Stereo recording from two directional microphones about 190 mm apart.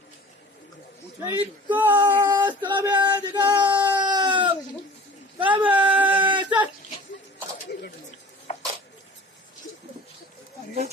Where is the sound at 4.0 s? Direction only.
25° right (ahead or behind).